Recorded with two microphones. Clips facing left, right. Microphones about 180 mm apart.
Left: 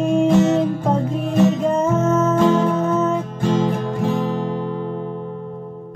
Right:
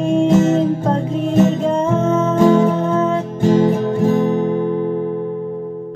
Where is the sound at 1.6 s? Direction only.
5° left (ahead or behind).